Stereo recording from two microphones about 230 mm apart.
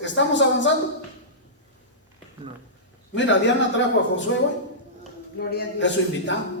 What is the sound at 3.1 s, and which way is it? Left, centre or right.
Speech, left.